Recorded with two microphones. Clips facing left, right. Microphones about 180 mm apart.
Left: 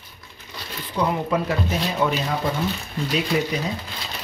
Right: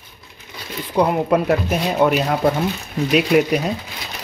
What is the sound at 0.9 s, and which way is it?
Speech, 60° right (ahead or behind).